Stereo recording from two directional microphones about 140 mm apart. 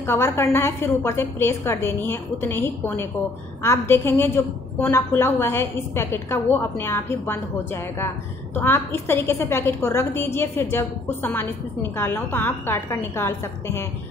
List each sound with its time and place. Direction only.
0.0 s a woman's voice: 15° left (ahead or behind)